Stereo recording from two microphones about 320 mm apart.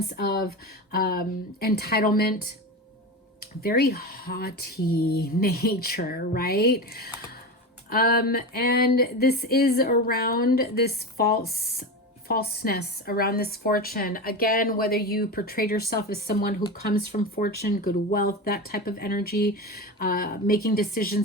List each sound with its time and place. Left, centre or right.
0.2 s speech: left